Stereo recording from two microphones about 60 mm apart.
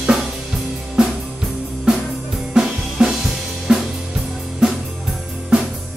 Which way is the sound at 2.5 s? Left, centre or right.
Centre.